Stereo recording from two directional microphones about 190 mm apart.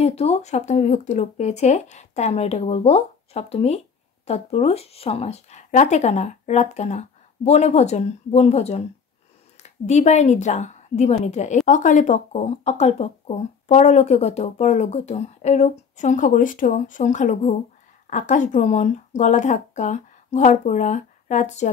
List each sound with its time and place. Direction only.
0.0 s a woman's voice: 35° left (ahead or behind)